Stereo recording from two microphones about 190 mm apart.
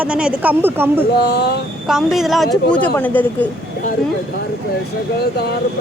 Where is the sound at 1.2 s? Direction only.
60° left (ahead or behind).